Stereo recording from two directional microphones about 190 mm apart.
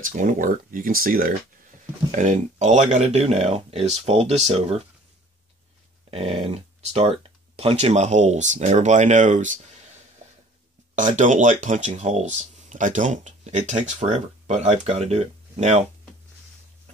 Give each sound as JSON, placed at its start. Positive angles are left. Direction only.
{"t": 0.0, "sound": "speech", "side_deg": -45}
{"t": 6.0, "sound": "speech", "side_deg": -30}
{"t": 11.0, "sound": "speech", "side_deg": -40}